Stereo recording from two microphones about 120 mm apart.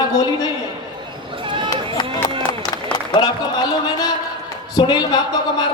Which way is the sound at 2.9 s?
40° left (ahead or behind).